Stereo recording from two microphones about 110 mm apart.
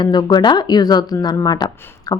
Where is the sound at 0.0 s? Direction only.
40° left (ahead or behind).